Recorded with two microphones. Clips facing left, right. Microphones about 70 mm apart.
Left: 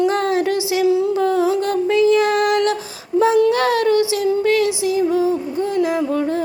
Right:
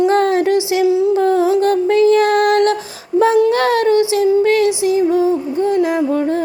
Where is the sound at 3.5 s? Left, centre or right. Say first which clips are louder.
Right 2 dB; right.